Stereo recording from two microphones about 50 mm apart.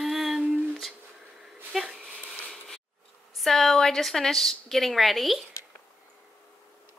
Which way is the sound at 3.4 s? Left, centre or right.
Centre.